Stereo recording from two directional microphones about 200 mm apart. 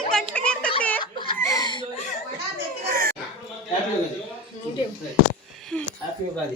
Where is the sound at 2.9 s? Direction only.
50° right (ahead or behind).